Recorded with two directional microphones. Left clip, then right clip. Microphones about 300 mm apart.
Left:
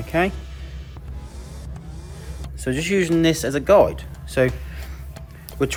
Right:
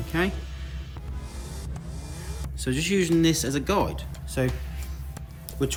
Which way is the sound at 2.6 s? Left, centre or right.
Centre.